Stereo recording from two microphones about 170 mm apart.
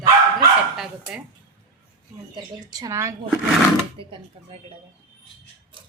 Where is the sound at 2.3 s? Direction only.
20° right (ahead or behind).